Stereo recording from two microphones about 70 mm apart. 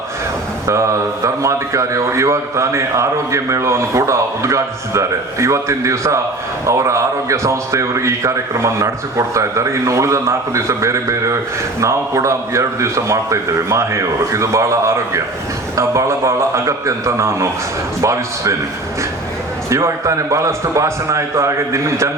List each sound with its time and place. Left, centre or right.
0.7 s a man's voice: right
19.7 s a man's voice: right